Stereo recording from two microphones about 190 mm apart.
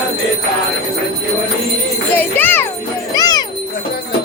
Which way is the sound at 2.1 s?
10° left (ahead or behind).